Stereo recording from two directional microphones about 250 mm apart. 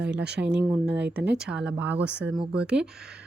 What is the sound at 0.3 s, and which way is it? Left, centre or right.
Speech, right.